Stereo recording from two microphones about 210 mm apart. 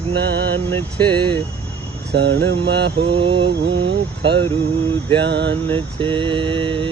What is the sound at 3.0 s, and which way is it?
Mantra, 25° right (ahead or behind).